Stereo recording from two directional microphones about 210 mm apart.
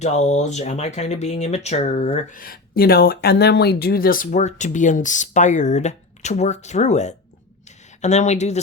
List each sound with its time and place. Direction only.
0.0 s speech: 30° left (ahead or behind)